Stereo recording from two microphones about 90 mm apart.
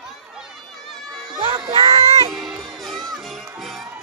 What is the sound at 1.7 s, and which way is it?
Music, 90° right.